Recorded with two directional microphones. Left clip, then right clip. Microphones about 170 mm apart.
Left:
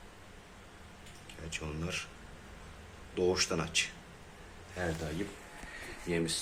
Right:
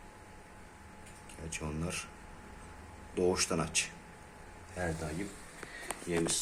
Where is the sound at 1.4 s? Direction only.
30° right (ahead or behind).